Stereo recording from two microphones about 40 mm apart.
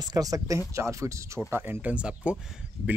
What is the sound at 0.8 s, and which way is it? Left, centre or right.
Speech, right.